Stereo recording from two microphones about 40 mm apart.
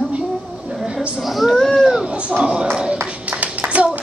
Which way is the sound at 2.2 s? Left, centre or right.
Right.